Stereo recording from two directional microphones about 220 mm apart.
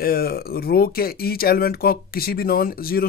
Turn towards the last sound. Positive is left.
turn(degrees=45)  # may be behind; listen again after turning